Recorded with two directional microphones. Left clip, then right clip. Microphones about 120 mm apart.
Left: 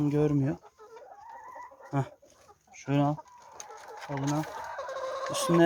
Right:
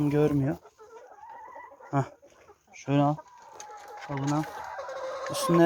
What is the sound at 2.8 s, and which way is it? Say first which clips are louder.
Chicken: right 3 dB; 10° right (ahead or behind).